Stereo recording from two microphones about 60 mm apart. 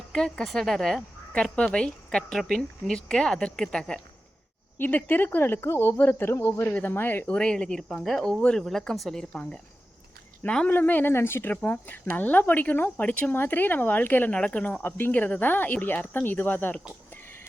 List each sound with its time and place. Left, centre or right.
0.1 s speech: centre
1.3 s speech: centre
4.8 s speech: left
6.7 s speech: left
7.3 s speech: centre
9.3 s speech: centre
10.7 s speech: left
11.1 s speech: left
11.5 s speech: left
13.3 s speech: left
14.3 s speech: centre; by 16.7 s left